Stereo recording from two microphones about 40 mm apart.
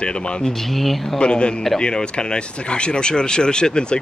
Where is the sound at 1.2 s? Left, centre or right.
Left.